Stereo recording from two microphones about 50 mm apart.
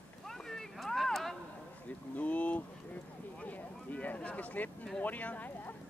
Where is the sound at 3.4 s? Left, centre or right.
Left.